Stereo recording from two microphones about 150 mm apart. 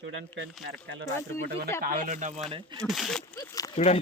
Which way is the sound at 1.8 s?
65° right (ahead or behind).